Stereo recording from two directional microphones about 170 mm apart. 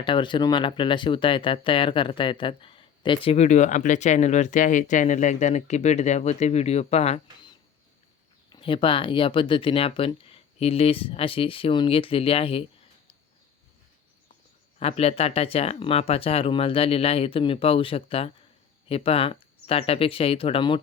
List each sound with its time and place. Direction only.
0.0 s speech: 30° left (ahead or behind)
8.4 s speech: 30° left (ahead or behind)
14.8 s speech: 35° left (ahead or behind)